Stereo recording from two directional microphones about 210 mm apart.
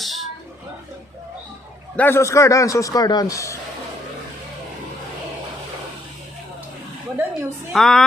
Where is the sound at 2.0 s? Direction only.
10° left (ahead or behind).